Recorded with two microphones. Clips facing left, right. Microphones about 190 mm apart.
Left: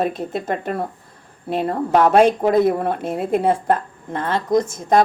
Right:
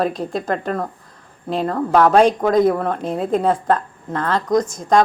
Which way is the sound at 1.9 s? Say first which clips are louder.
Even; 10° left (ahead or behind).